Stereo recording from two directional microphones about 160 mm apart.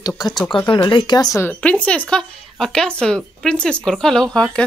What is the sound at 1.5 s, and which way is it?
Speech, 10° left (ahead or behind).